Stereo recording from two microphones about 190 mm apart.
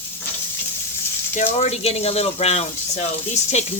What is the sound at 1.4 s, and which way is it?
Speech, 35° left (ahead or behind).